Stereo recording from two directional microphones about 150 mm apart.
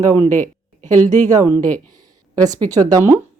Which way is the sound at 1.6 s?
10° left (ahead or behind).